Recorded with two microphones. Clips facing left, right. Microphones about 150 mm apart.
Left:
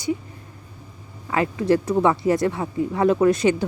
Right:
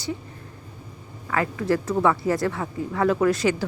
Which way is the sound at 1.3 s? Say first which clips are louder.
Left 4 dB; 20° left (ahead or behind).